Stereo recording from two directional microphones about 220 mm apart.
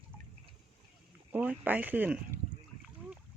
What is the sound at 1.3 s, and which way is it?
Speech, 10° right (ahead or behind).